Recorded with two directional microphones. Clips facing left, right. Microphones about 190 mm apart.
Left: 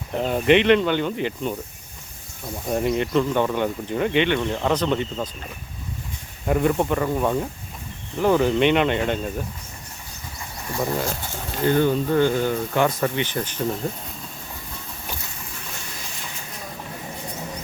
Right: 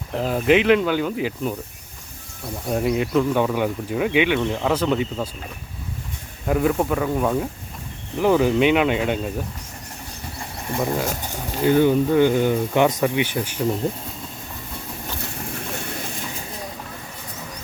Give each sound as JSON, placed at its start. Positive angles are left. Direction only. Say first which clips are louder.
{"t": 0.1, "sound": "speech", "louder": "even", "side_deg": 0}
{"t": 2.6, "sound": "speech", "louder": "right 1 dB", "side_deg": 0}
{"t": 6.4, "sound": "speech", "louder": "even", "side_deg": 0}
{"t": 10.7, "sound": "speech", "louder": "right 2 dB", "side_deg": -20}
{"t": 15.4, "sound": "a sound", "louder": "right 8 dB", "side_deg": -60}